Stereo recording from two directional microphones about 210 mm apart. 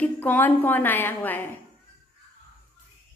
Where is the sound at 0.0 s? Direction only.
10° left (ahead or behind).